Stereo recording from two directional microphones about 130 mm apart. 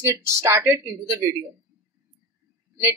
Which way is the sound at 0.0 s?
20° right (ahead or behind).